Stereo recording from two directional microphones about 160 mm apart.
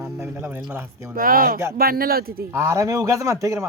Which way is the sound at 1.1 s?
65° right (ahead or behind).